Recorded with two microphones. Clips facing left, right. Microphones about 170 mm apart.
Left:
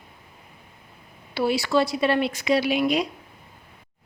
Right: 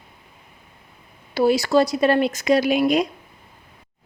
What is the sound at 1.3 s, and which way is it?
Speech, 40° right (ahead or behind).